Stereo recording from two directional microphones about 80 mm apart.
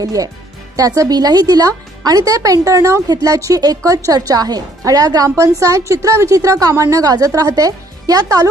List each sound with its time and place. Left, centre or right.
0.0 s a woman's voice: right
3.1 s a woman's voice: right